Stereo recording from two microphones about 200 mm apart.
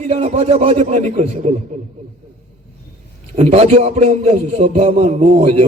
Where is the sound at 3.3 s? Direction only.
30° right (ahead or behind).